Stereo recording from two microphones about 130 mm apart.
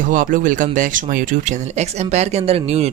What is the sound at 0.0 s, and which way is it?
Speech, 90° right.